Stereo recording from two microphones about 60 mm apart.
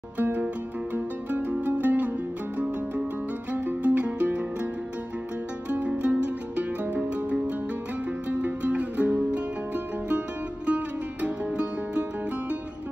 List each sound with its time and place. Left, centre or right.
0.2 s music: right
3.5 s music: right
5.7 s music: right